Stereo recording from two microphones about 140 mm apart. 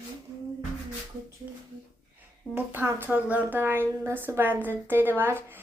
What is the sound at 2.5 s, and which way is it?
A woman's voice, 15° right (ahead or behind).